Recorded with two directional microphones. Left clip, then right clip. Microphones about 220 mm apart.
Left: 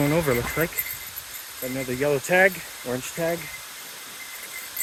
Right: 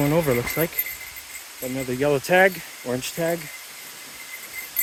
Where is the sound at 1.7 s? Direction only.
20° right (ahead or behind).